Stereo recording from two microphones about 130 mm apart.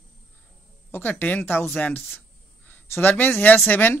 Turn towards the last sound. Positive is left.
turn(degrees=15)  # may be behind; listen again after turning